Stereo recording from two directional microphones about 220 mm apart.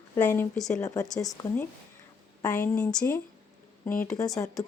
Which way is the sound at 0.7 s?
15° left (ahead or behind).